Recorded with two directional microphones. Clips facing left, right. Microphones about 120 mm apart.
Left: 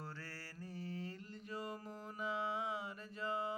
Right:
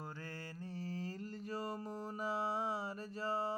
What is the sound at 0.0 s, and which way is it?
Mantra, 20° right (ahead or behind).